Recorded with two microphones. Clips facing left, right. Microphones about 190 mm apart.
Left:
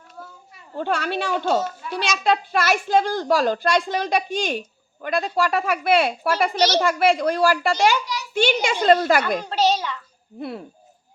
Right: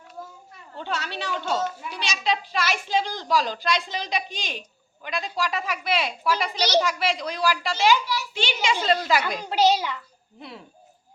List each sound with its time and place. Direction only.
0.8 s a child's voice: 55° left (ahead or behind)
9.4 s a child's voice: 10° right (ahead or behind)